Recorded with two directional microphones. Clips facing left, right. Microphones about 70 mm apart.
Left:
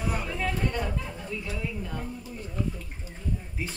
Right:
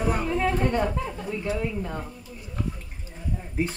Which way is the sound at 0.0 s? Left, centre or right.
Right.